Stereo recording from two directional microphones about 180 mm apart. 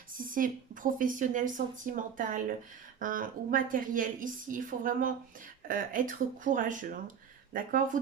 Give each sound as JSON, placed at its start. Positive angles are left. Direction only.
{"t": 0.1, "sound": "speech", "side_deg": -50}